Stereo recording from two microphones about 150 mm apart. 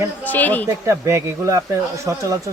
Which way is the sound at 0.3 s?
10° left (ahead or behind).